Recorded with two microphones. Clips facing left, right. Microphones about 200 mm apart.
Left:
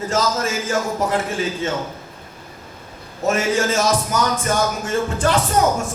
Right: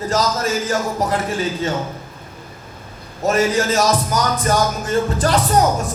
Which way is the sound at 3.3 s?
35° right (ahead or behind).